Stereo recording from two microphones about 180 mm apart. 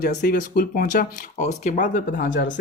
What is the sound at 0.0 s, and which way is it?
Speech, 50° left (ahead or behind).